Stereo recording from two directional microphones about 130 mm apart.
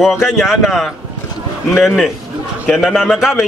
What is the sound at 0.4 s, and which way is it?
A man's voice, centre (ahead or behind).